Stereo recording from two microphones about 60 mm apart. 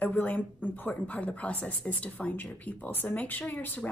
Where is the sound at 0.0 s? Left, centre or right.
Left.